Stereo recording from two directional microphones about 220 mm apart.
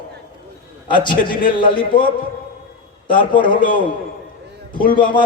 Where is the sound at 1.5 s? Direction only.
25° left (ahead or behind).